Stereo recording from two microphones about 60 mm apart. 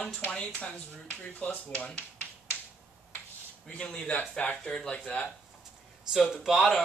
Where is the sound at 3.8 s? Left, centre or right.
Centre.